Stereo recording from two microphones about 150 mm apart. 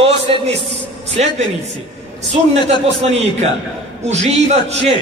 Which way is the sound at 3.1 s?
45° right (ahead or behind).